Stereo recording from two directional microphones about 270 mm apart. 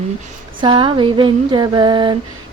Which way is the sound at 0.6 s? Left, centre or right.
Centre.